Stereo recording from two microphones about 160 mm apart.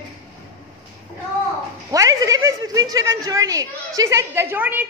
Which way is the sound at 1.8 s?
20° right (ahead or behind).